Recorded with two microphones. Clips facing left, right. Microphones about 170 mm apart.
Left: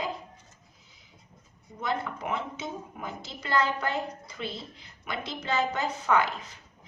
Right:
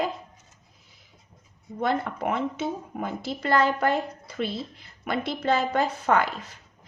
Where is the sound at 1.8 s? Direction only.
60° right (ahead or behind).